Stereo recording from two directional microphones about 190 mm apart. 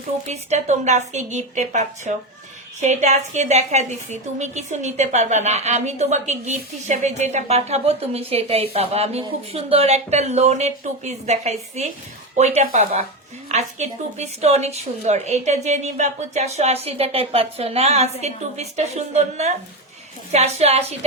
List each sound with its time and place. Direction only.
0.3 s a woman's voice: 40° right (ahead or behind)